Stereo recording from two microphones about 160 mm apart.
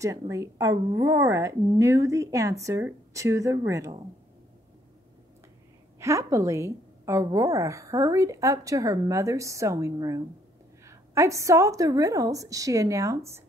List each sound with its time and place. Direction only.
0.0 s a woman's voice: 20° right (ahead or behind)
5.9 s a woman's voice: 20° right (ahead or behind)